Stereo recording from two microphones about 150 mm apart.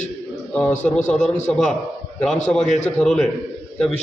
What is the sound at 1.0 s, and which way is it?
A man's voice, 5° left (ahead or behind).